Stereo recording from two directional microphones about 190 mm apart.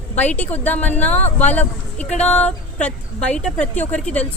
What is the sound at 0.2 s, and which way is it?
Speech, 10° left (ahead or behind).